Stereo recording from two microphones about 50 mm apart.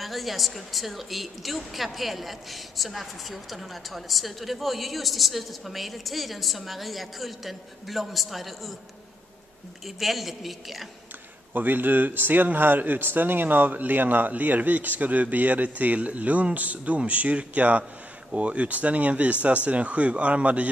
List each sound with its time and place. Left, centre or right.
0.0 s a woman's voice: centre
9.8 s a woman's voice: centre
11.5 s speech: right